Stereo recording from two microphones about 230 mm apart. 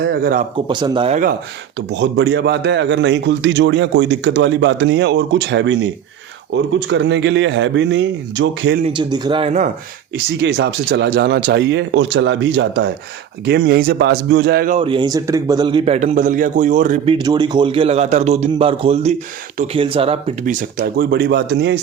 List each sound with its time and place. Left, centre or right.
0.0 s a man's voice: right
0.7 s a man's voice: centre
1.9 s a man's voice: right
8.8 s a man's voice: right
10.4 s a man's voice: right
14.8 s a man's voice: right
17.2 s a man's voice: centre
20.4 s a man's voice: right